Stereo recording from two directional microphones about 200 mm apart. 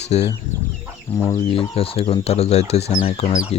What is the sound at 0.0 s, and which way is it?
Speech, 35° left (ahead or behind).